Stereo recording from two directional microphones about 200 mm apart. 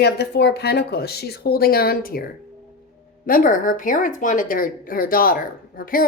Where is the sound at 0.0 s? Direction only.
55° left (ahead or behind).